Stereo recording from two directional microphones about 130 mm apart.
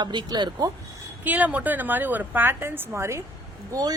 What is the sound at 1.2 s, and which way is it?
A woman's voice, 10° right (ahead or behind).